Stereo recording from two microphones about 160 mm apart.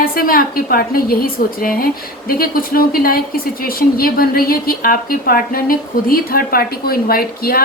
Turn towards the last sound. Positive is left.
turn(degrees=70)  # may be behind; listen again after turning